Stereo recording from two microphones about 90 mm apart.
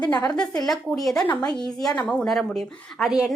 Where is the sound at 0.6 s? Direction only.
Centre (ahead or behind).